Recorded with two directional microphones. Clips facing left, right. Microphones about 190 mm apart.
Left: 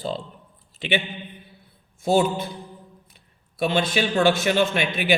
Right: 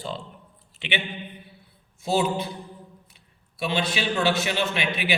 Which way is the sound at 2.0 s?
50° left (ahead or behind).